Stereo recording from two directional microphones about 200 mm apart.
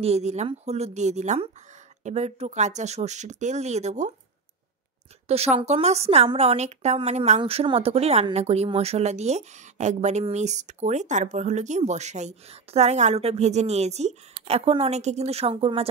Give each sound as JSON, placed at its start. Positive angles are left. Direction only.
{"t": 0.0, "sound": "a woman's voice", "side_deg": -35}
{"t": 5.3, "sound": "a woman's voice", "side_deg": -30}